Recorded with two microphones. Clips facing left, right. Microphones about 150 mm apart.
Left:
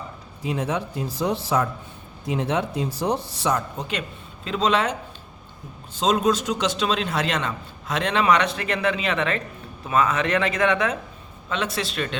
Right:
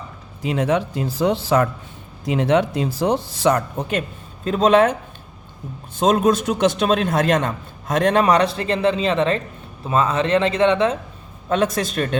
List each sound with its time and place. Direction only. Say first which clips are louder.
0.4 s a man's voice: right 6 dB; 75° right (ahead or behind); by 4.9 s 50° right (ahead or behind)
6.0 s a man's voice: right 4 dB; 55° right (ahead or behind); by 10.9 s 25° right (ahead or behind)
11.4 s a man's voice: right 7 dB; 45° right (ahead or behind)